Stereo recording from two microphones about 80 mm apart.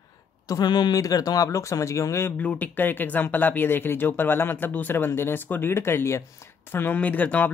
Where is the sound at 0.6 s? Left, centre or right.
Left.